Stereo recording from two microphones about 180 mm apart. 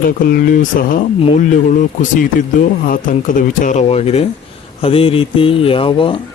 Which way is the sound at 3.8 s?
35° left (ahead or behind).